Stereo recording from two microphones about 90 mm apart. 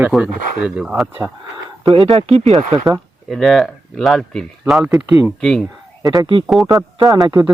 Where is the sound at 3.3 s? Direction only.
Centre (ahead or behind).